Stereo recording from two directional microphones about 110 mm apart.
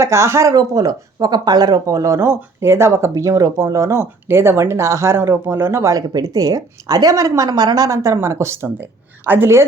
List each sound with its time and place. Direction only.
0.0 s speech: 25° right (ahead or behind)